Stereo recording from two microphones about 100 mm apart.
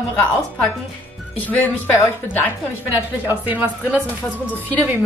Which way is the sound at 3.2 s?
15° right (ahead or behind).